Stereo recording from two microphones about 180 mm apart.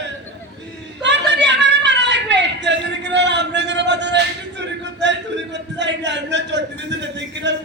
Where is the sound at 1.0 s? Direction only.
75° right (ahead or behind).